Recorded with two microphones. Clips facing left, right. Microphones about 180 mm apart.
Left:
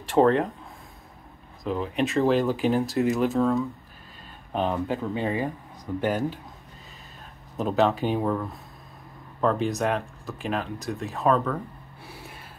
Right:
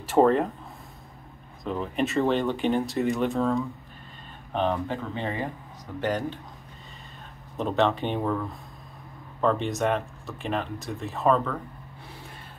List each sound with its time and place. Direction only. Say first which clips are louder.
0.0 s speech: even; 5° right (ahead or behind)
1.6 s speech: left 1 dB; centre (ahead or behind)
7.5 s speech: left 1 dB; centre (ahead or behind)